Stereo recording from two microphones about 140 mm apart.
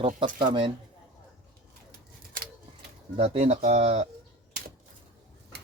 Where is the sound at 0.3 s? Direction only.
70° right (ahead or behind).